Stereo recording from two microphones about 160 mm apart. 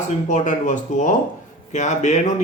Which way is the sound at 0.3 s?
50° left (ahead or behind).